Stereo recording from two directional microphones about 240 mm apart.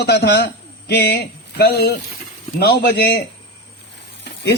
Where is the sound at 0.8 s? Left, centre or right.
Left.